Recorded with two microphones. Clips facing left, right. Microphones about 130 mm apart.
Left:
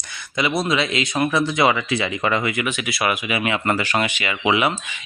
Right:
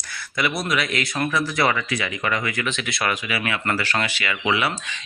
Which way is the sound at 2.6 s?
10° left (ahead or behind).